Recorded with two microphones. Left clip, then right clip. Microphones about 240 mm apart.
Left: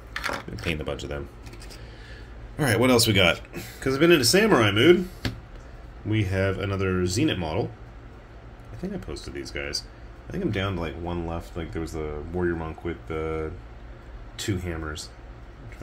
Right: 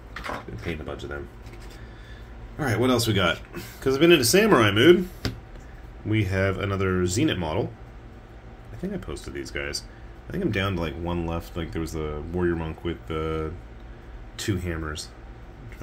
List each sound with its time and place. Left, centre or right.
2.6 s speech: left
3.5 s speech: centre
6.0 s speech: centre
8.8 s speech: centre